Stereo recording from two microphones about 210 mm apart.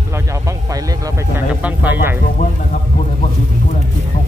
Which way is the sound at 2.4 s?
40° left (ahead or behind).